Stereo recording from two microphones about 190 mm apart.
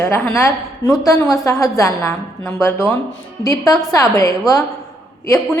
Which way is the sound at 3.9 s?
15° left (ahead or behind).